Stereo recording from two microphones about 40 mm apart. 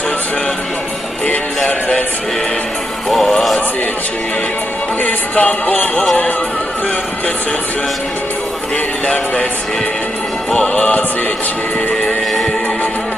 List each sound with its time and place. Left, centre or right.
3.1 s music: centre
5.0 s a man's voice: left
9.0 s music: left